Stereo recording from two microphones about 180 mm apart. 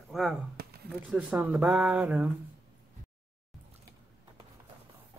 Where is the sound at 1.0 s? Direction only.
5° right (ahead or behind).